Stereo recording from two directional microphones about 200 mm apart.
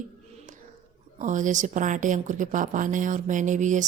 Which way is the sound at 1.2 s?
40° right (ahead or behind).